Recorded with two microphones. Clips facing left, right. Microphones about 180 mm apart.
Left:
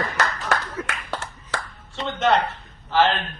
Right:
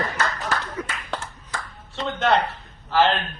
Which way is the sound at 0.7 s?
5° left (ahead or behind).